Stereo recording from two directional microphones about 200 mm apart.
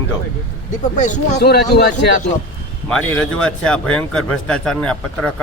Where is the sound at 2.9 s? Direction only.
5° left (ahead or behind).